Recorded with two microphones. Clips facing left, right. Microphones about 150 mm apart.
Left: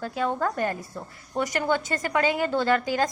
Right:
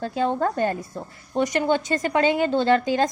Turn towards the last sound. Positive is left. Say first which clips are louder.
# right 4 dB
turn(degrees=-25)  # may be behind; listen again after turning